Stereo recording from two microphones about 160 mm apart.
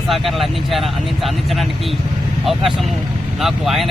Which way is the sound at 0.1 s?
Centre (ahead or behind).